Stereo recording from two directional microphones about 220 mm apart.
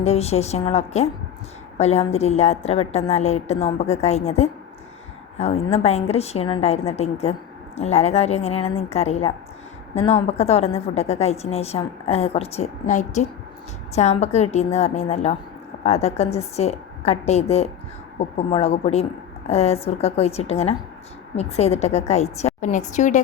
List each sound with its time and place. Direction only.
0.0 s a woman's voice: 30° left (ahead or behind)